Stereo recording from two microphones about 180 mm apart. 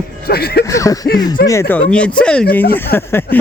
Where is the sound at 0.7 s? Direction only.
20° left (ahead or behind).